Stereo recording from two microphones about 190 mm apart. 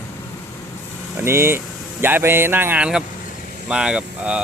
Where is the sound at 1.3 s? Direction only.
15° right (ahead or behind).